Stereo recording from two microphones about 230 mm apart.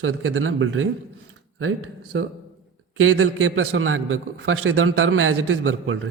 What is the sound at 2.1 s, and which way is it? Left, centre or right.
A man's voice, right.